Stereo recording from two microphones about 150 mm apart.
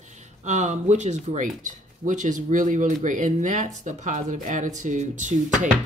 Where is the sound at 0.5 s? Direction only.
50° right (ahead or behind).